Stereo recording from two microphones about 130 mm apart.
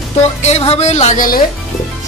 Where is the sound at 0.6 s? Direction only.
55° left (ahead or behind); by 1.4 s 90° left.